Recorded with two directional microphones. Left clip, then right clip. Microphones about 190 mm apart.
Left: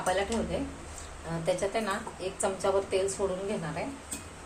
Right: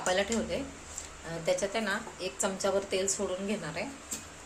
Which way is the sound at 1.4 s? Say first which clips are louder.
Left 1 dB; 20° right (ahead or behind).